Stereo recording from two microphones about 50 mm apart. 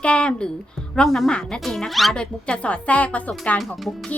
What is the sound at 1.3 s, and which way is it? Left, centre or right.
Speech, centre.